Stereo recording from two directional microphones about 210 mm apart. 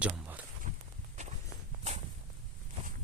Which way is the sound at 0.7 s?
35° right (ahead or behind).